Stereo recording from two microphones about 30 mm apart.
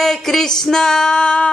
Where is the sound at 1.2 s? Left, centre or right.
Left.